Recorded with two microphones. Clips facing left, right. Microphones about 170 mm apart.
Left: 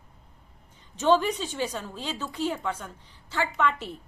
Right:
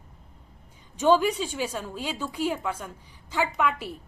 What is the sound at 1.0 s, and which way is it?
A woman's voice, 10° right (ahead or behind).